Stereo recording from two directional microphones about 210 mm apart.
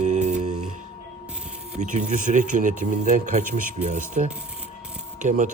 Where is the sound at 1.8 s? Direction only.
35° right (ahead or behind).